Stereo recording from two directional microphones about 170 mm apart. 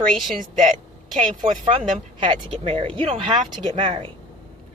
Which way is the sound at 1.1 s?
50° right (ahead or behind).